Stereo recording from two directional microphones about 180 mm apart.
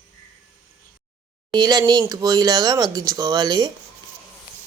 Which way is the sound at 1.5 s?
20° right (ahead or behind).